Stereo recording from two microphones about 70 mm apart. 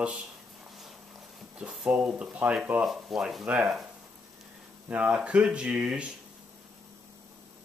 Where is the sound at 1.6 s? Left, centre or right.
Centre.